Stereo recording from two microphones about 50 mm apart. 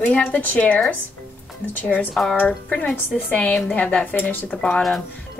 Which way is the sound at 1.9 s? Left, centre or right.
Left.